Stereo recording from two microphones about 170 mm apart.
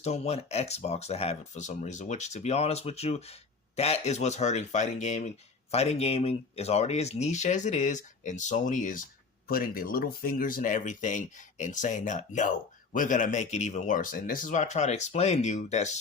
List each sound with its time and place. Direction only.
0.0 s speech: 40° left (ahead or behind)